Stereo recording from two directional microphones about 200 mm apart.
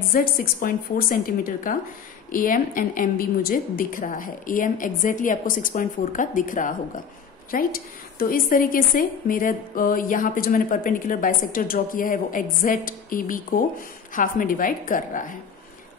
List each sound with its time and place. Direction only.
0.1 s a woman's voice: 45° left (ahead or behind)